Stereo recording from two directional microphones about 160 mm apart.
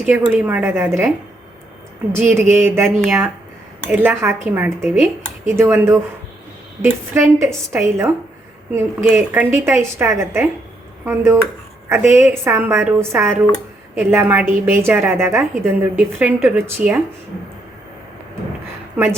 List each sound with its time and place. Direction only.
0.0 s a woman's voice: 5° right (ahead or behind)
2.1 s a woman's voice: 15° right (ahead or behind)